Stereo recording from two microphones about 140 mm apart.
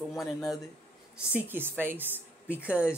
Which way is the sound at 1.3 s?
15° right (ahead or behind).